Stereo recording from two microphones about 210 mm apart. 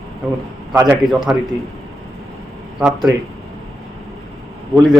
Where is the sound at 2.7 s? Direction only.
Centre (ahead or behind).